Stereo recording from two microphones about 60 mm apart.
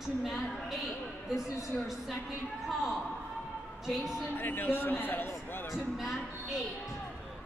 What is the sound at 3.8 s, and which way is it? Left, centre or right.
Speech, centre.